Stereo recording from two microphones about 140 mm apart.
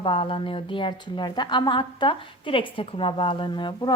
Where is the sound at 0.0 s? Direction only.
40° left (ahead or behind).